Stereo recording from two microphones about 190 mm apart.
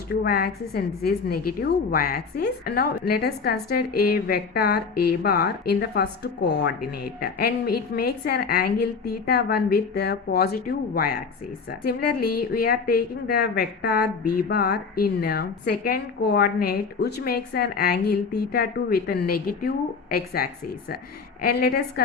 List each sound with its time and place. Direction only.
0.1 s a woman's voice: 55° left (ahead or behind)
7.2 s a woman's voice: 55° left (ahead or behind)